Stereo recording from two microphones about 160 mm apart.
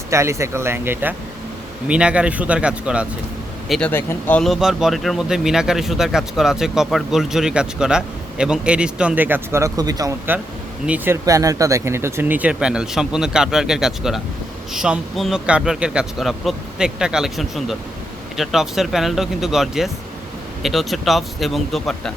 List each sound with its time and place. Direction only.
0.1 s speech: 15° right (ahead or behind)
3.7 s speech: 5° left (ahead or behind); by 10.2 s 25° right (ahead or behind)
10.8 s speech: 10° right (ahead or behind)